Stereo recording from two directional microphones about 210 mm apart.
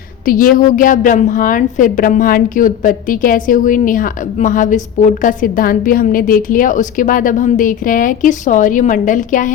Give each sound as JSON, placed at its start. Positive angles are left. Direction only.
{"t": 0.3, "sound": "a woman's voice", "side_deg": 40}